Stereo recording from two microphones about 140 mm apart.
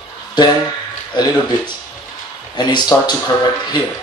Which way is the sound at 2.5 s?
30° left (ahead or behind).